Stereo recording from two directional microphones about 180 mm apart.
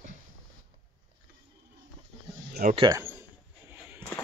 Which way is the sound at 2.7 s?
25° right (ahead or behind).